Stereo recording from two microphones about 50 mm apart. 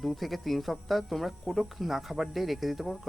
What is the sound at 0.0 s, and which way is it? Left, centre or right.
Speech, centre.